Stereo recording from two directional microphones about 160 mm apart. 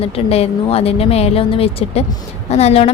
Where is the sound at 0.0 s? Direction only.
40° left (ahead or behind).